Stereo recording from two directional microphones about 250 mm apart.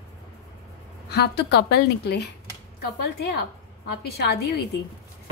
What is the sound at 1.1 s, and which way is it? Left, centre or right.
A woman's voice, left.